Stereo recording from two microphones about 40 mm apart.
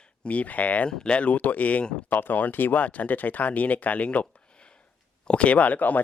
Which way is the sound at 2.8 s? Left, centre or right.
Left.